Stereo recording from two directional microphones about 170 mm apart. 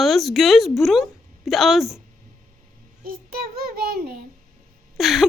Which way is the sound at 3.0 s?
60° right (ahead or behind).